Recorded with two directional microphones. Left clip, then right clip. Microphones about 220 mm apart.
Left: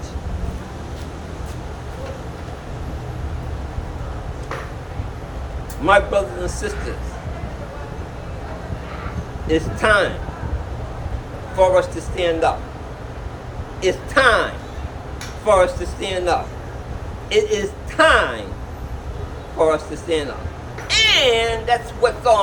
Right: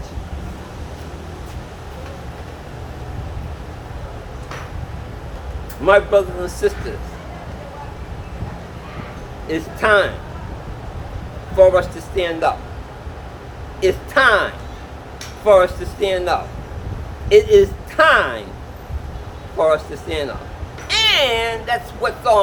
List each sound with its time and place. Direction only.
5.8 s a man's voice: 25° right (ahead or behind)
9.5 s a man's voice: 20° right (ahead or behind)
11.6 s a man's voice: 25° right (ahead or behind)
13.8 s a man's voice: 20° right (ahead or behind)
19.6 s a man's voice: 20° right (ahead or behind)